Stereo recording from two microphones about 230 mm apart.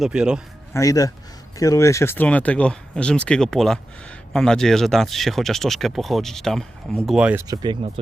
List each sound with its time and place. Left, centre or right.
0.0 s speech: centre
0.7 s speech: centre
7.4 s speech: centre